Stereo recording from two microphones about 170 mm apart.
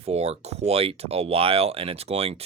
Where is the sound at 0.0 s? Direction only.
40° right (ahead or behind).